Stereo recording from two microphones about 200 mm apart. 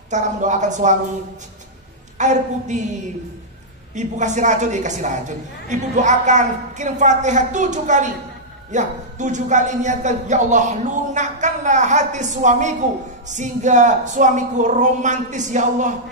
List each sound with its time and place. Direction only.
0.1 s a man's voice: 35° right (ahead or behind)
2.1 s a man's voice: 35° right (ahead or behind)
3.9 s a man's voice: 35° right (ahead or behind)